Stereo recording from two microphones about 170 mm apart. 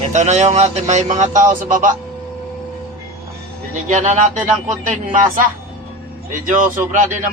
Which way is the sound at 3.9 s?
45° right (ahead or behind).